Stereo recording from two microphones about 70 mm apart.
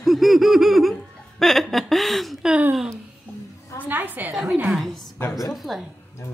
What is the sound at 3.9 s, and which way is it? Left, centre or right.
Speech, right.